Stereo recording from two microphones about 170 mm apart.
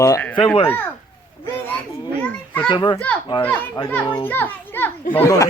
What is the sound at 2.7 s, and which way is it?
Speech, 30° left (ahead or behind).